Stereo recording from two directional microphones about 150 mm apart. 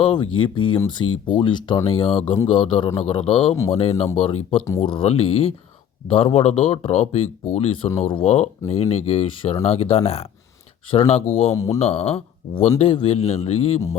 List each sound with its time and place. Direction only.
0.0 s speech: 30° left (ahead or behind)
11.5 s speech: 20° left (ahead or behind)
11.8 s speech: 45° left (ahead or behind)